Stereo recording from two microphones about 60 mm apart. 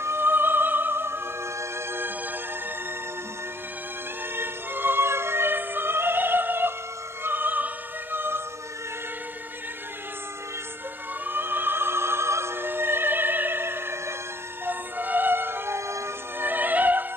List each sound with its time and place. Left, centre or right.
0.0 s music: right
4.4 s music: right
7.2 s opera: right
11.2 s opera: right
14.7 s music: right
16.4 s music: right